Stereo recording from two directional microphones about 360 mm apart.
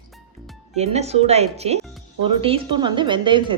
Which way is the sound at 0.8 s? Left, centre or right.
Centre.